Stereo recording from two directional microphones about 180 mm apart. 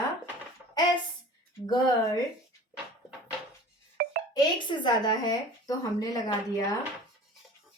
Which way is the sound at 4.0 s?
55° right (ahead or behind).